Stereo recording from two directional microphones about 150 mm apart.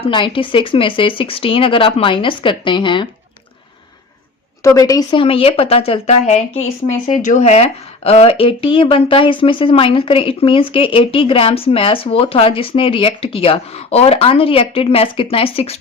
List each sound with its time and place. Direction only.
0.1 s a woman's voice: 35° left (ahead or behind)
4.6 s a woman's voice: 25° left (ahead or behind)
5.2 s a woman's voice: 40° left (ahead or behind)